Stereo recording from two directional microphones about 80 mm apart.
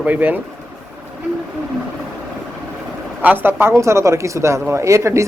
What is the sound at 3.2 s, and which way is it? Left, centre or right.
Speech, right.